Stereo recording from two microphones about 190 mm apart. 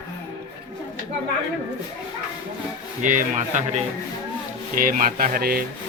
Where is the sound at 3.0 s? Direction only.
40° right (ahead or behind).